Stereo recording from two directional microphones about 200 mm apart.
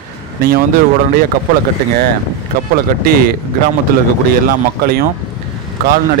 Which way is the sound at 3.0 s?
45° right (ahead or behind).